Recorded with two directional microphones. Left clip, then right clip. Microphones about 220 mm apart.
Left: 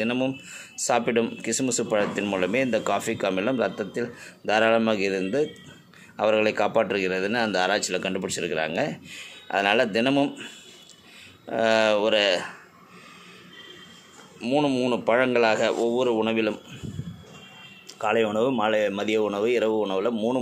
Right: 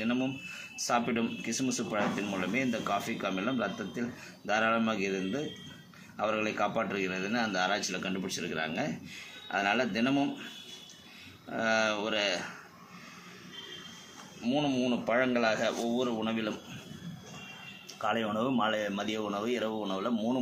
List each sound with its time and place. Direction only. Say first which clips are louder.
0.0 s speech: left 7 dB; 40° left (ahead or behind)
11.5 s speech: left 8 dB; 40° left (ahead or behind)
14.4 s speech: left 7 dB; 40° left (ahead or behind)
18.0 s speech: left 8 dB; 35° left (ahead or behind)